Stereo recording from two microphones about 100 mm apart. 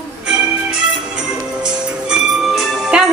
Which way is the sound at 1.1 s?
5° right (ahead or behind).